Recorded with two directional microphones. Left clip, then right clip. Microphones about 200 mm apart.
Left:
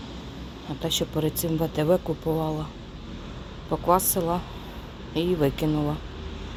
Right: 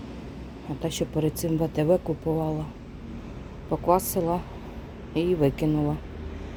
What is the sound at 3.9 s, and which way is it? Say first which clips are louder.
Speech: left 1 dB; 20° right (ahead or behind).